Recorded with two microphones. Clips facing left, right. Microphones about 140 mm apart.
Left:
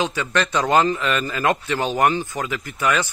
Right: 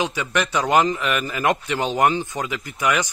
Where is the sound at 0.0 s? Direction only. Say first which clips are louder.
Left 1 dB; 15° right (ahead or behind).